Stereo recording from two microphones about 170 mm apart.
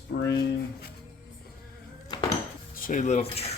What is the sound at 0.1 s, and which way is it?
Speech, 80° left.